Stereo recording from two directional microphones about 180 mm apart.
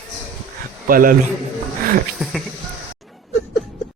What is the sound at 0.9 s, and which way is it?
Speech, 50° right (ahead or behind).